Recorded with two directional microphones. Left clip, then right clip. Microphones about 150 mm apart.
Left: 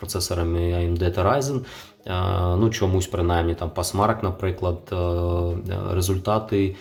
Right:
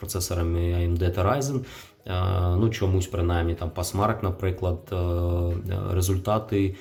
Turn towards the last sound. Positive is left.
turn(degrees=0)  # may be behind; listen again after turning